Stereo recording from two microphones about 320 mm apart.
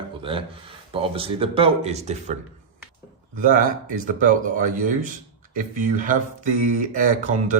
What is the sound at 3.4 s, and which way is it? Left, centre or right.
Speech, right.